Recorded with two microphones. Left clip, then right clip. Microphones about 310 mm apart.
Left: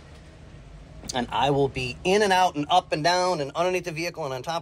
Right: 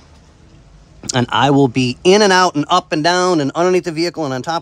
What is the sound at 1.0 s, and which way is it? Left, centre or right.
Speech, right.